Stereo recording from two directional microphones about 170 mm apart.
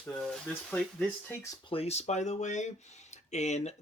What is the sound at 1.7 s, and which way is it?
Speech, 35° left (ahead or behind).